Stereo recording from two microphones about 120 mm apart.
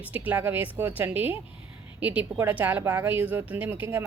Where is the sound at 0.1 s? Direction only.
15° right (ahead or behind).